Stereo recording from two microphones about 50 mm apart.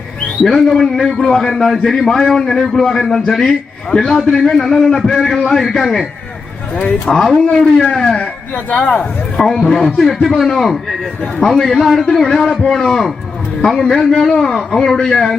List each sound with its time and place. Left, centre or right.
0.4 s a man's voice: centre
7.1 s a man's voice: centre
8.5 s speech: left
9.4 s a man's voice: centre